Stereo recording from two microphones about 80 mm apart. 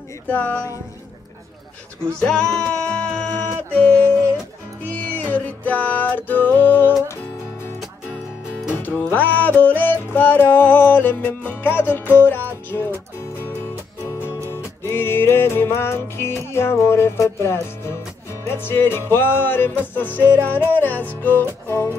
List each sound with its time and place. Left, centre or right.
0.3 s music: left
2.1 s music: centre; by 6.9 s left
8.7 s music: left
14.5 s music: left